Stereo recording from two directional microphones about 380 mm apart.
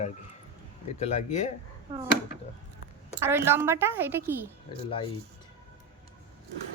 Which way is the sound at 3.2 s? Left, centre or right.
Centre.